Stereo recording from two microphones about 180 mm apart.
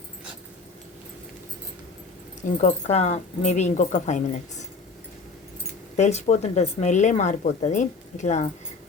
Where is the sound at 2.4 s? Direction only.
40° left (ahead or behind).